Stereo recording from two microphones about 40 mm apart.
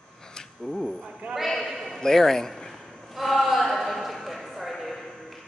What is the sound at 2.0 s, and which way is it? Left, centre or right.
Speech, centre.